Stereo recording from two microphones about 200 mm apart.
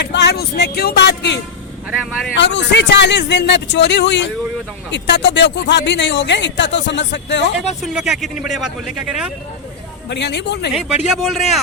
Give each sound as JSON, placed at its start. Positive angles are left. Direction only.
{"t": 0.0, "sound": "speech", "side_deg": 60}
{"t": 7.7, "sound": "speech", "side_deg": 0}
{"t": 10.1, "sound": "speech", "side_deg": 60}
{"t": 10.8, "sound": "speech", "side_deg": -5}